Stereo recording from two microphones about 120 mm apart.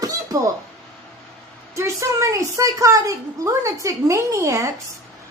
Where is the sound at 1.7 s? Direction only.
25° right (ahead or behind).